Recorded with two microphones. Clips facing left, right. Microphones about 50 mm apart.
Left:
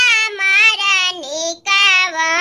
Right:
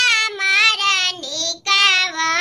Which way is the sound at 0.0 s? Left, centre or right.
Left.